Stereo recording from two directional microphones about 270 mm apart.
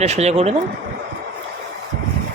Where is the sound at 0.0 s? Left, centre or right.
Right.